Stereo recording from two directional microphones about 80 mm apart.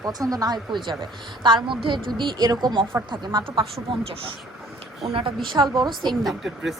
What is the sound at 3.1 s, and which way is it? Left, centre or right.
Speech, right.